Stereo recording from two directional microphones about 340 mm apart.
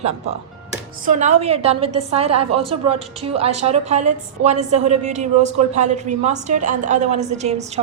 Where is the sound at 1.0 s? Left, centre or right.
Right.